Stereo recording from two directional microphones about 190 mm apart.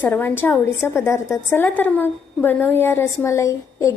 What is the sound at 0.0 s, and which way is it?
A woman's voice, 10° left (ahead or behind).